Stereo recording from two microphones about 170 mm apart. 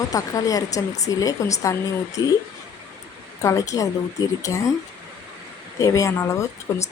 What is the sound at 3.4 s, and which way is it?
Speech, 20° left (ahead or behind).